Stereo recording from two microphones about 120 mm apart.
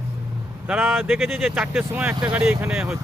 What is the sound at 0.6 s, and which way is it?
Speech, 5° right (ahead or behind).